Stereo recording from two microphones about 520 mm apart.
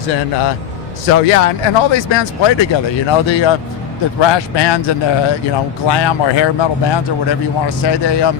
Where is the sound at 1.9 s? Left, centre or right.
Left.